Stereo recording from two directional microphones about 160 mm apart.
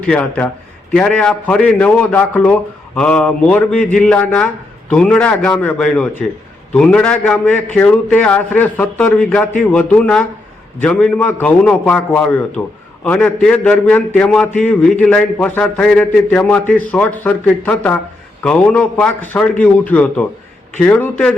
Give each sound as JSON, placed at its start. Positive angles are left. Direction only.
{"t": 0.1, "sound": "a man's voice", "side_deg": 10}